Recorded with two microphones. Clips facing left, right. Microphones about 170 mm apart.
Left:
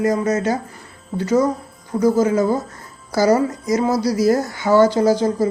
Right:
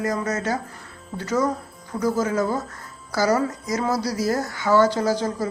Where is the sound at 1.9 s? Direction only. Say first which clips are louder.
Left 7 dB; 15° left (ahead or behind).